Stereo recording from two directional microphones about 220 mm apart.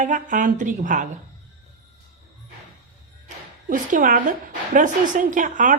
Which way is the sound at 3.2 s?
35° right (ahead or behind).